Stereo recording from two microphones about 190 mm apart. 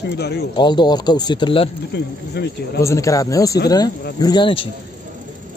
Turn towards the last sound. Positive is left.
turn(degrees=25)  # may be behind; listen again after turning